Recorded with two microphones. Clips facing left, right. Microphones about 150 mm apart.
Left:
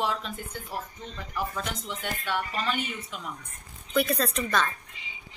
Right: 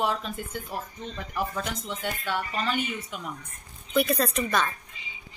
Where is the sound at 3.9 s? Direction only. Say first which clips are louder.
Right 2 dB; 5° right (ahead or behind).